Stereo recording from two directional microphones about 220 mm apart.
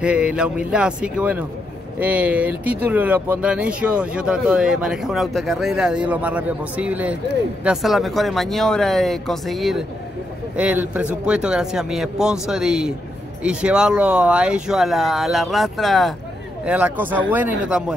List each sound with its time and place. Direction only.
0.0 s speech: 5° right (ahead or behind)